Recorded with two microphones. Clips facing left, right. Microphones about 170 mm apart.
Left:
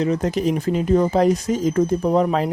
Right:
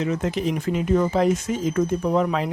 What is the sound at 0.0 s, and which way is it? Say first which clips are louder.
Speech: left 4 dB; 35° left (ahead or behind).